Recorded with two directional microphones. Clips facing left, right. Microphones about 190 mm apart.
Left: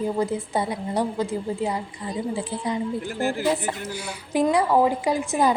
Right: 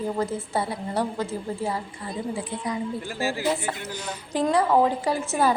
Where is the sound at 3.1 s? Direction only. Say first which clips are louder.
Left 2 dB; 55° left (ahead or behind).